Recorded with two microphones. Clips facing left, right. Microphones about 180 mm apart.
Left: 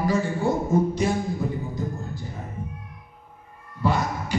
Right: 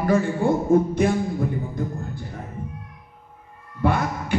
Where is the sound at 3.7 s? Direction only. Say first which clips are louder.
Right 2 dB; 55° right (ahead or behind).